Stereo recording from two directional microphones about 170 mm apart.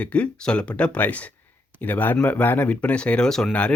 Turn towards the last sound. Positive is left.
turn(degrees=5)  # may be behind; listen again after turning